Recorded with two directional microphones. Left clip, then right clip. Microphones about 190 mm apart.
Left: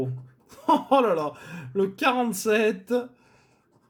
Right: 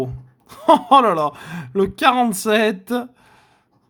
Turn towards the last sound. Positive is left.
turn(degrees=-40)  # may be behind; listen again after turning